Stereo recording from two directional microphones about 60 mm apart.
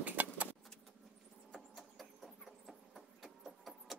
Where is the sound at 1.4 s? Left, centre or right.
Centre.